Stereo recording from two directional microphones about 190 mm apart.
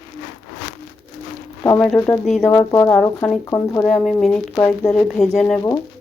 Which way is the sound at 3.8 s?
Centre (ahead or behind).